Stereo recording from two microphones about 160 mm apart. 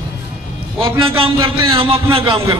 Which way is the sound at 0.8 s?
35° right (ahead or behind).